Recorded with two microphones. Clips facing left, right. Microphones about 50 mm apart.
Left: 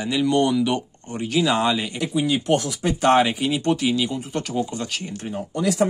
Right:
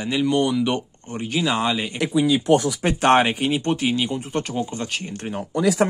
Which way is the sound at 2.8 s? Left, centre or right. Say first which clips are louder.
Right 1 dB; right.